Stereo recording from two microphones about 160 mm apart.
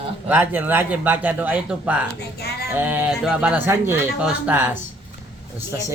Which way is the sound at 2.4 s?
85° left.